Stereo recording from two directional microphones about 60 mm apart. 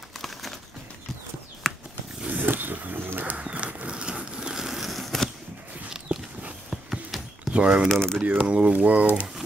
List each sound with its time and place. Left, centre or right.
0.2 s crumpling: centre
1.6 s a sound: centre
2.2 s a sound: right; by 5.3 s centre
5.9 s walk: centre
6.7 s horse: centre
7.5 s speech: centre
7.9 s speech: centre
8.4 s speech: centre